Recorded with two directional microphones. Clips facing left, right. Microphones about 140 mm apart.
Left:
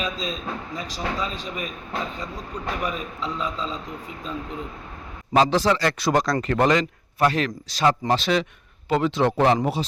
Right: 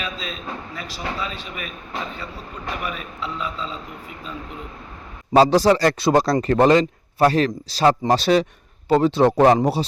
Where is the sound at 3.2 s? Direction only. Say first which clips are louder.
Even; 5° right (ahead or behind).